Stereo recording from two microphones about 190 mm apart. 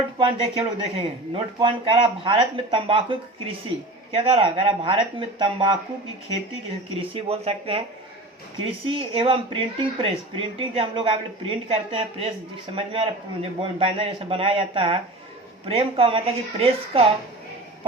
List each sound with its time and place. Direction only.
0.2 s speech: 25° right (ahead or behind)
7.0 s speech: 30° right (ahead or behind)